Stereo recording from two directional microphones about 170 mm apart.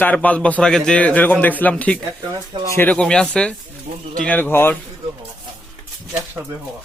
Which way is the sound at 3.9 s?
50° right (ahead or behind).